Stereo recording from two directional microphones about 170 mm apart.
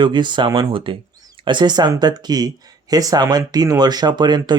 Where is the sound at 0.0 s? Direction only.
25° right (ahead or behind).